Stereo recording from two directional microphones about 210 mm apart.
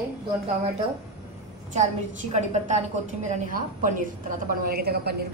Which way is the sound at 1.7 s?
35° right (ahead or behind).